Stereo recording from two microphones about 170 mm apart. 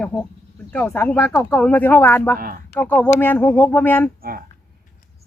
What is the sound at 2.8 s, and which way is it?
Speech, 10° left (ahead or behind).